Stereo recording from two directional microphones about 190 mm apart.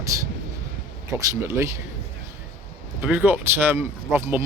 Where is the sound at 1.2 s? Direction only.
15° right (ahead or behind).